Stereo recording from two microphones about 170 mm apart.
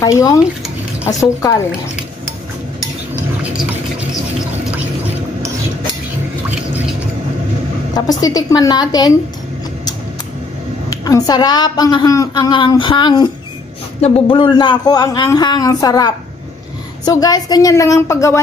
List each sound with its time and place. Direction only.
0.0 s a woman's voice: 20° left (ahead or behind)
7.9 s a woman's voice: 20° left (ahead or behind)
10.9 s a woman's voice: 20° left (ahead or behind)